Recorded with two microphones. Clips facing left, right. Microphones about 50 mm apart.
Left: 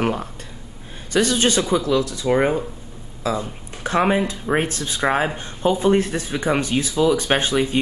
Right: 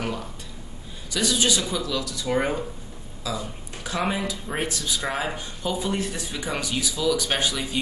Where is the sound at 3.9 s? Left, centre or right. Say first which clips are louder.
Left 8 dB; left.